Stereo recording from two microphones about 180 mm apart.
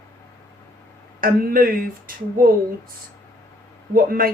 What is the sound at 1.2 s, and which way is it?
Speech, 50° right (ahead or behind).